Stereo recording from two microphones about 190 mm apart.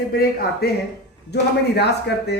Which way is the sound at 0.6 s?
55° left (ahead or behind).